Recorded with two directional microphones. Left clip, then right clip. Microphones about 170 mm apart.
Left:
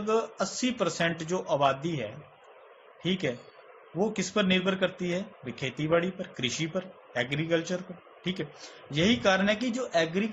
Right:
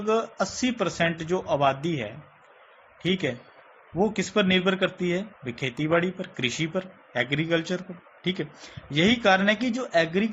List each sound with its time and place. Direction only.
0.1 s speech: 20° right (ahead or behind)